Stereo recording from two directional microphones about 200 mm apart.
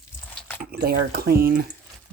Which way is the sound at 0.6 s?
50° right (ahead or behind).